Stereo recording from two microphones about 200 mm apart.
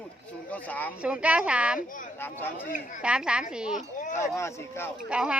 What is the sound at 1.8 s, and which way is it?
Speech, 40° left (ahead or behind).